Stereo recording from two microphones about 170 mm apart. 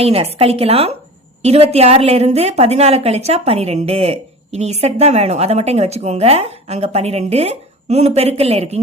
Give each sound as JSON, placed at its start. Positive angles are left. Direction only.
{"t": 0.0, "sound": "a woman's voice", "side_deg": -35}